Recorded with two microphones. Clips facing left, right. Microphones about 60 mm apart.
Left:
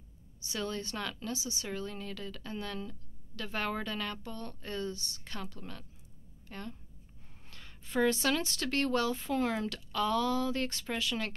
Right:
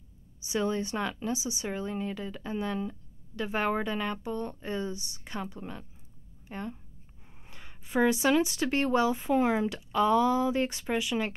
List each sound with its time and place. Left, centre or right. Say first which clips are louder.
0.4 s a woman's voice: right 7 dB; centre